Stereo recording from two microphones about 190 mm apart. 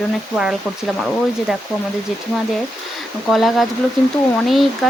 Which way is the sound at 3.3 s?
Centre (ahead or behind).